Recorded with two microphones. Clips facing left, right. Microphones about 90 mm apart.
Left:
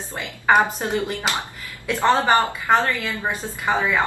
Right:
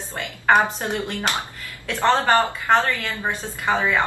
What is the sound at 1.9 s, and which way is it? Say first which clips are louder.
A woman's voice: left 1 dB; 10° left (ahead or behind).